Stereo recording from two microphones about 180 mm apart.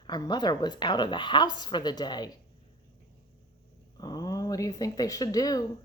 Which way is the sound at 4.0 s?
20° left (ahead or behind).